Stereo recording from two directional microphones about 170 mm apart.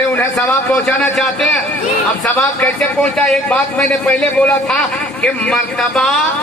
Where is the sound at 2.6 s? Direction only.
5° left (ahead or behind).